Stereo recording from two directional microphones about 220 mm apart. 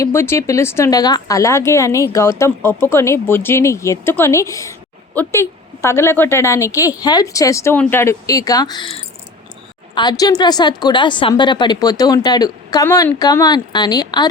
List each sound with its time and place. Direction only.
0.0 s a woman's voice: 10° left (ahead or behind)